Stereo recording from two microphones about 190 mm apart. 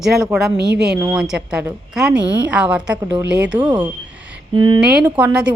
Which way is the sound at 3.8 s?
5° right (ahead or behind).